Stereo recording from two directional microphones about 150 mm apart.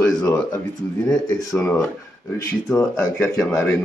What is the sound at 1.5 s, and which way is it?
Speech, 20° left (ahead or behind).